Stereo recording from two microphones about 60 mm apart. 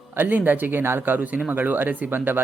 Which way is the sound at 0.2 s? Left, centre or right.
Right.